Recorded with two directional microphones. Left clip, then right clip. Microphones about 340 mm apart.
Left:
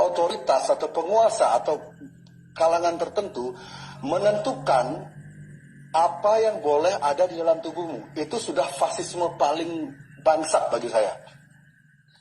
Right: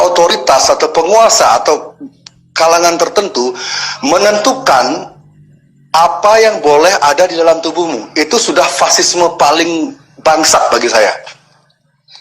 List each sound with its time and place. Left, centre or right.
0.0 s music: right
0.5 s a man's voice: right
6.3 s speech: right
7.8 s a man's voice: right
8.1 s speech: right
9.6 s a man's voice: right
10.2 s speech: right